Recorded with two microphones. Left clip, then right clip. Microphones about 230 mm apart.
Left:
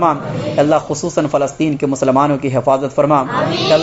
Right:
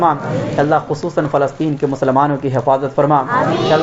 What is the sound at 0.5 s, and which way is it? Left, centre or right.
Speech, left.